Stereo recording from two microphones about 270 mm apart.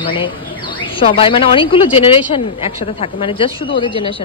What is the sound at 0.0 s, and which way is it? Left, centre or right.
A woman's voice, centre.